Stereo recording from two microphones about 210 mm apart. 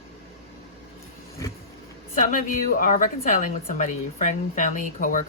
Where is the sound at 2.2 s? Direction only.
40° left (ahead or behind).